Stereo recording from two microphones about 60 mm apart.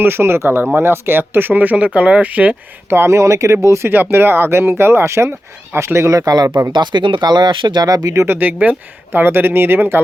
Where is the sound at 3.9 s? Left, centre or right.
Right.